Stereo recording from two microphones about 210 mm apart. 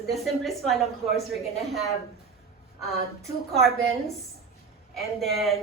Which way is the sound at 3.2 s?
Centre (ahead or behind).